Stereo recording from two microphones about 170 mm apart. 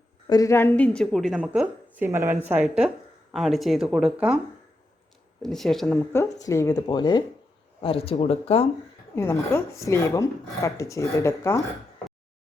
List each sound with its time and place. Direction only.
0.3 s a woman's voice: 20° left (ahead or behind); by 4.4 s 5° right (ahead or behind)
5.4 s a woman's voice: centre (ahead or behind)
6.1 s a woman's voice: 20° left (ahead or behind); by 8.6 s 35° left (ahead or behind)
9.1 s speech: 15° left (ahead or behind)